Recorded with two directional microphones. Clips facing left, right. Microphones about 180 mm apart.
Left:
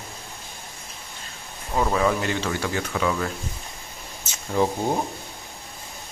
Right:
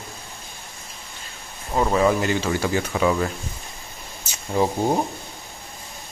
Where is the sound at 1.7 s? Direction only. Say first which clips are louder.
Right 3 dB; 10° right (ahead or behind).